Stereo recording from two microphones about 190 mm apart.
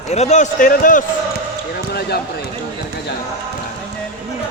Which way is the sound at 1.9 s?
55° left (ahead or behind).